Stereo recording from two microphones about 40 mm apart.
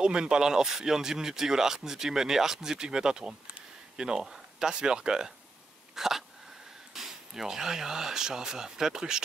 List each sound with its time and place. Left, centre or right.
0.0 s speech: right
5.9 s a sound: centre
6.9 s speech: centre